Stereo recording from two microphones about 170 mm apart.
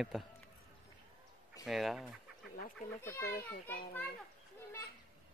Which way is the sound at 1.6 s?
Centre (ahead or behind).